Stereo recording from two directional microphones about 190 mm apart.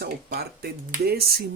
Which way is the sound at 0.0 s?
55° right (ahead or behind).